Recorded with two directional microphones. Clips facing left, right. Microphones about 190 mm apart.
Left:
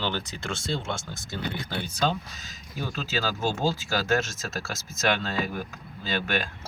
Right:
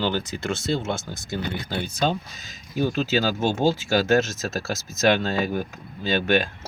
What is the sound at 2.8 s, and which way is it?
Speech, 25° right (ahead or behind).